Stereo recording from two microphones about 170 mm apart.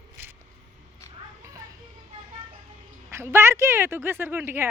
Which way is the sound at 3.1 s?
15° right (ahead or behind).